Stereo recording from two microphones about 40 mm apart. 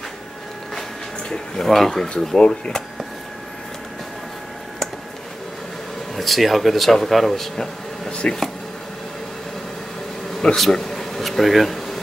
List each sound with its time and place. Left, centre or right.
1.3 s speech: centre
6.1 s speech: centre
8.1 s speech: left
10.5 s speech: centre